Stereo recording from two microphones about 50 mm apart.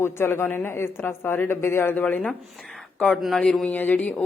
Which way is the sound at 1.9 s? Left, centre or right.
Left.